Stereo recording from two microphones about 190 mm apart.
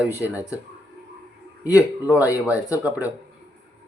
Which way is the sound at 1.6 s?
15° left (ahead or behind).